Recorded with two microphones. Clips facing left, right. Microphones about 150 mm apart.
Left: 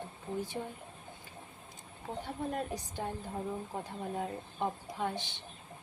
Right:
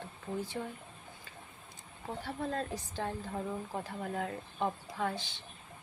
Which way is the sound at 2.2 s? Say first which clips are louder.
Right 1 dB; 15° left (ahead or behind).